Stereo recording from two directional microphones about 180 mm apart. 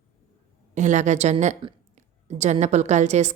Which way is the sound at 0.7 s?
40° right (ahead or behind).